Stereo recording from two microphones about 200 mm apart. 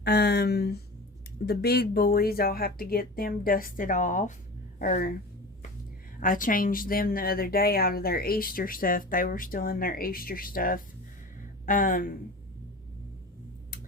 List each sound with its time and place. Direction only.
0.0 s speech: 55° left (ahead or behind)
6.1 s speech: 40° left (ahead or behind)